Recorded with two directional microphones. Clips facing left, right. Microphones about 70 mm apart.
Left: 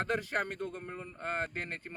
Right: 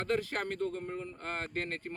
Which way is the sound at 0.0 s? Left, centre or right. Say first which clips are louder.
Even; left.